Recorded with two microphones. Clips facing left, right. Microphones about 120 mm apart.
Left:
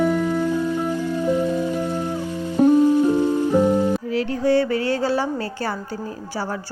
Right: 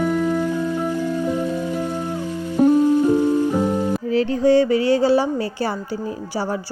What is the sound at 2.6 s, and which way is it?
Music, 5° left (ahead or behind).